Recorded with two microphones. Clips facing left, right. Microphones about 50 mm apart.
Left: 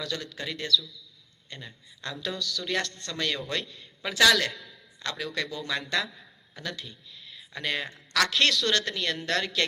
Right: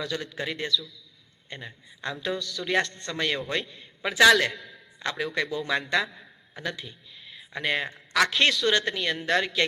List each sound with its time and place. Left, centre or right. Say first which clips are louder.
0.0 s a man's voice: right 3 dB; centre
6.6 s a woman's voice: right 3 dB; centre